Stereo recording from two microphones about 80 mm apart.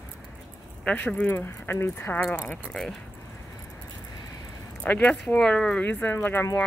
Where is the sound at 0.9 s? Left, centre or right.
Centre.